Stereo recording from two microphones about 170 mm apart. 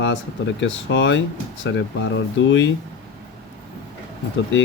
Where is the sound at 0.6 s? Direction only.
90° left.